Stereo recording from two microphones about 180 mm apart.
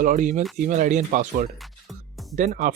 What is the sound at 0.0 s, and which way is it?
Speech, 45° right (ahead or behind).